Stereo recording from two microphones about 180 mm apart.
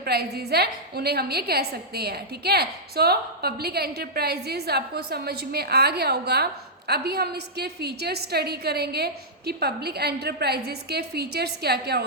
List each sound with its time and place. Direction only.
0.0 s a woman's voice: 60° right (ahead or behind)